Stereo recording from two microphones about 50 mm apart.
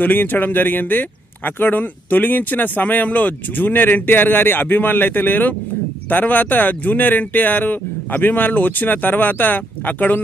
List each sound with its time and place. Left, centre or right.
0.0 s speech: left